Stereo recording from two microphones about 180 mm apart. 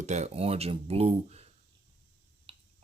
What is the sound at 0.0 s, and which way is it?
Speech, 40° right (ahead or behind).